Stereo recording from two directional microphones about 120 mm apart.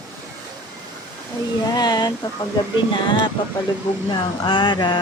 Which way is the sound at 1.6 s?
35° left (ahead or behind).